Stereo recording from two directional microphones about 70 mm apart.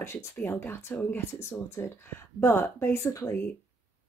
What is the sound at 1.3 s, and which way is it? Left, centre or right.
Speech, left.